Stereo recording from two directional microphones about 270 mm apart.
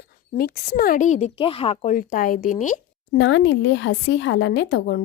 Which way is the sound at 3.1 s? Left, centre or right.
Left.